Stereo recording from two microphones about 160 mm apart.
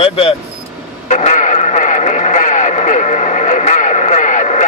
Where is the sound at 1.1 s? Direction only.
45° left (ahead or behind).